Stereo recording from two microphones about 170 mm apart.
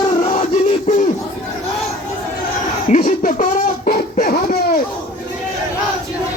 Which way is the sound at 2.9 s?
55° left (ahead or behind).